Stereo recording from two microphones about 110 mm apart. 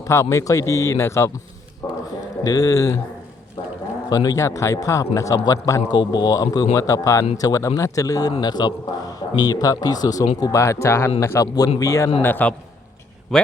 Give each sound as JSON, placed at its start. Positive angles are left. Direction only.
{"t": 0.0, "sound": "a man's voice", "side_deg": 25}
{"t": 1.8, "sound": "a sound", "side_deg": 40}
{"t": 2.4, "sound": "speech", "side_deg": 35}
{"t": 4.1, "sound": "a man's voice", "side_deg": 35}
{"t": 12.2, "sound": "a man's voice", "side_deg": 15}
{"t": 13.3, "sound": "a man's voice", "side_deg": 0}